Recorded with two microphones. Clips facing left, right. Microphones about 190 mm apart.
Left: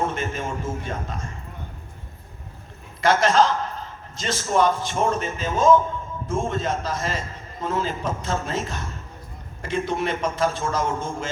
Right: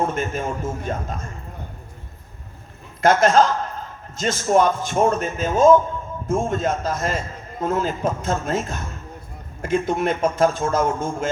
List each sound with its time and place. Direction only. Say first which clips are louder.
0.1 s a man's voice: right 3 dB; 45° right (ahead or behind)
3.0 s a man's voice: right 3 dB; 50° right (ahead or behind)